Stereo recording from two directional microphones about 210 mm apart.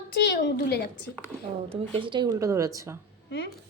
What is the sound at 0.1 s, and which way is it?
Speech, 55° left (ahead or behind).